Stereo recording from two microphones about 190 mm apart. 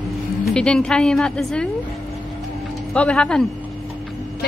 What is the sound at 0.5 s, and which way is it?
A woman's voice, 5° left (ahead or behind).